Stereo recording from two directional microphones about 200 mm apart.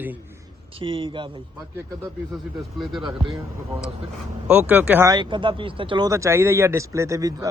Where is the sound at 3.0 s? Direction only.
20° right (ahead or behind).